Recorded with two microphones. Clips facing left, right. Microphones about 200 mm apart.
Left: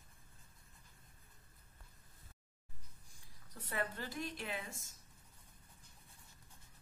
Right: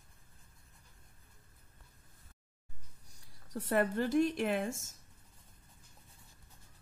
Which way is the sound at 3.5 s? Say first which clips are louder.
Right 11 dB; 50° right (ahead or behind).